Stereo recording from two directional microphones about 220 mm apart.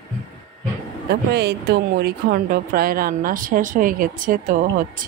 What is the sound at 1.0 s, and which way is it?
Speech, 45° right (ahead or behind).